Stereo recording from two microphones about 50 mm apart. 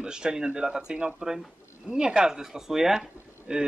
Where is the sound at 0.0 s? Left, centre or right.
Centre.